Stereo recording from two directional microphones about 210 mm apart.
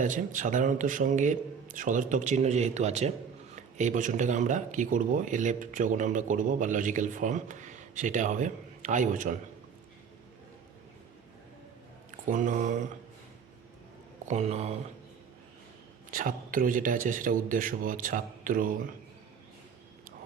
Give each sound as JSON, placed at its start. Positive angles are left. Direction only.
{"t": 0.0, "sound": "speech", "side_deg": -35}
{"t": 12.3, "sound": "speech", "side_deg": -35}
{"t": 14.3, "sound": "speech", "side_deg": -30}
{"t": 16.1, "sound": "speech", "side_deg": -40}